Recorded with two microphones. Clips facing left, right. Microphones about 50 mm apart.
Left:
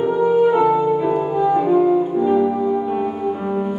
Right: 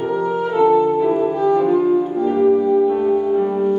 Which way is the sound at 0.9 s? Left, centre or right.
Centre.